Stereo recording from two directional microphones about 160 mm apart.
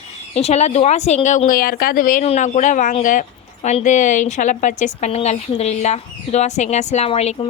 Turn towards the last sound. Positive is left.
turn(degrees=40)  # may be behind; listen again after turning